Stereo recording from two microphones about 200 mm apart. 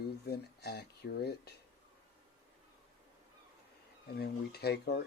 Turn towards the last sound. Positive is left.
turn(degrees=55)  # may be behind; listen again after turning